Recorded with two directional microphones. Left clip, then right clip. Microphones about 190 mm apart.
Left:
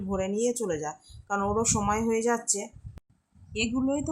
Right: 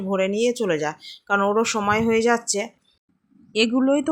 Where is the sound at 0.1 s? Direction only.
15° right (ahead or behind).